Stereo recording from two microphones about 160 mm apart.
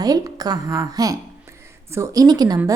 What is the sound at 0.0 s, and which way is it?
A woman's voice, 25° right (ahead or behind).